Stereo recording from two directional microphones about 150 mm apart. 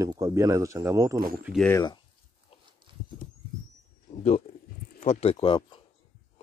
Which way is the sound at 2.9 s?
35° right (ahead or behind).